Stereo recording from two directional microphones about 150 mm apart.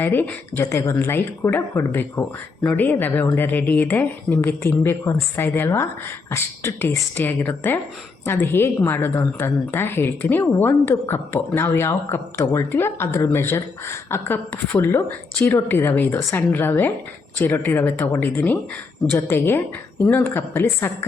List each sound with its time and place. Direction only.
0.0 s a woman's voice: 15° left (ahead or behind)